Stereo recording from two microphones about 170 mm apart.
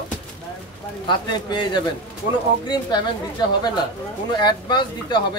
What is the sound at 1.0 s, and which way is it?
Speech, 25° left (ahead or behind).